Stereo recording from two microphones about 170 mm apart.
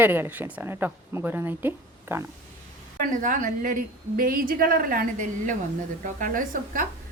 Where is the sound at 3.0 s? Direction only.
50° right (ahead or behind).